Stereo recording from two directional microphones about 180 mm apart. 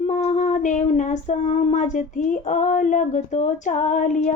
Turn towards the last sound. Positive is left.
turn(degrees=45)  # may be behind; listen again after turning